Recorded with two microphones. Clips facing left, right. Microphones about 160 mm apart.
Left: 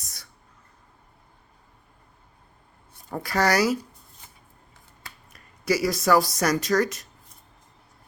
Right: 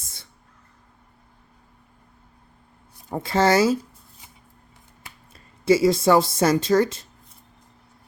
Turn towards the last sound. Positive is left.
turn(degrees=-25)  # may be behind; listen again after turning